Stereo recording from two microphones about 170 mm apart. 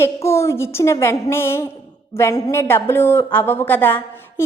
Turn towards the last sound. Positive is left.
turn(degrees=10)  # may be behind; listen again after turning